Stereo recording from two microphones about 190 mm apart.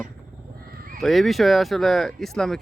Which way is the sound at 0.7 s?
50° right (ahead or behind).